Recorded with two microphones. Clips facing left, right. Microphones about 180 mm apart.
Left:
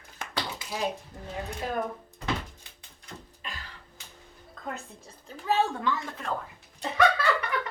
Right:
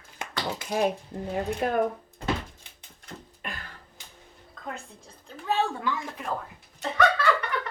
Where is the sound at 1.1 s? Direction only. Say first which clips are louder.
Right 7 dB; 55° right (ahead or behind).